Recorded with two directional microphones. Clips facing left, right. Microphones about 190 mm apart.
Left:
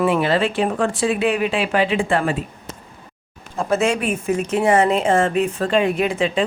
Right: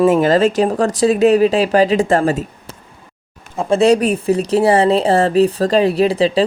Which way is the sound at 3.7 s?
35° right (ahead or behind).